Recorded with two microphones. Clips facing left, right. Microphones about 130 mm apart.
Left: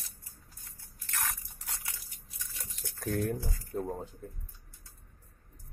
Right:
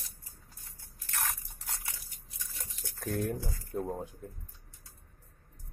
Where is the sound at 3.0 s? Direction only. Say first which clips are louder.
Left 1 dB; 15° right (ahead or behind).